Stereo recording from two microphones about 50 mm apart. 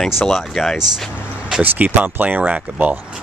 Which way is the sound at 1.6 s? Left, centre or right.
Right.